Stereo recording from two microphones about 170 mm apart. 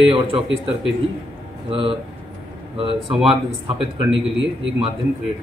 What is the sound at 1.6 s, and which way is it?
Speech, 35° right (ahead or behind).